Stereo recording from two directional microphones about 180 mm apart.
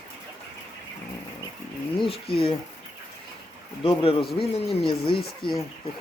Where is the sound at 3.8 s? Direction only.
30° left (ahead or behind).